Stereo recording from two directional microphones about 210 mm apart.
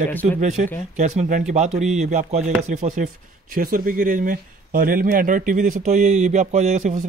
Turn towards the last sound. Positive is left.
turn(degrees=-35)  # may be behind; listen again after turning